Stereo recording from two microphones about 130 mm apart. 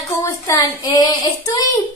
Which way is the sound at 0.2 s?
25° left (ahead or behind).